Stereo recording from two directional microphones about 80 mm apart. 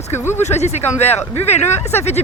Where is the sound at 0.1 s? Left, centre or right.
Left.